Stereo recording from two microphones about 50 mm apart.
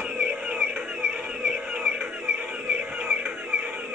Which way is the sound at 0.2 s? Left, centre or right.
Right.